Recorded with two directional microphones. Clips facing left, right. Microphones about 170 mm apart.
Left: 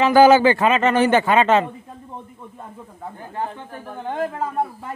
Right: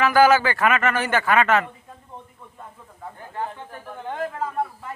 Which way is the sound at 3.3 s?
30° left (ahead or behind).